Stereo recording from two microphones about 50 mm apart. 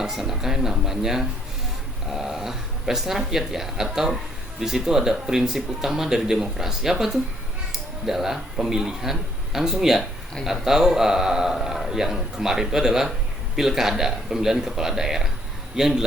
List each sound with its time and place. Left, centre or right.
0.0 s a man's voice: centre